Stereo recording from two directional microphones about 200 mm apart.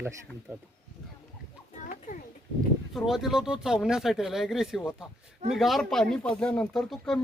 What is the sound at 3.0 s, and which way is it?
Speech, centre (ahead or behind).